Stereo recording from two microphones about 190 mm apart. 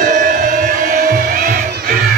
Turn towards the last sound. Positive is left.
turn(degrees=-45)  # may be behind; listen again after turning